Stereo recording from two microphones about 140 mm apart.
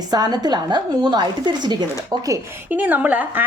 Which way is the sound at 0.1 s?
30° right (ahead or behind).